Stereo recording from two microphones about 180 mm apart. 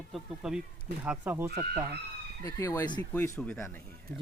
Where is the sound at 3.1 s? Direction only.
10° left (ahead or behind).